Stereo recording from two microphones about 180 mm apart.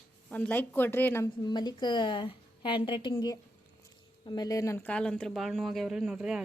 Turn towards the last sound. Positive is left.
turn(degrees=-5)  # may be behind; listen again after turning